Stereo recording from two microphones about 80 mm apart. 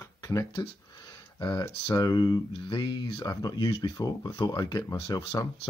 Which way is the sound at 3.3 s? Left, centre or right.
Left.